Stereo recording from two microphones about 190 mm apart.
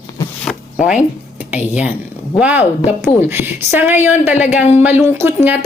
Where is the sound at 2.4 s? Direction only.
5° right (ahead or behind).